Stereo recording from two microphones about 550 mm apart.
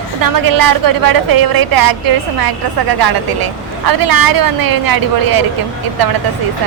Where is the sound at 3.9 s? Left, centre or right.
Right.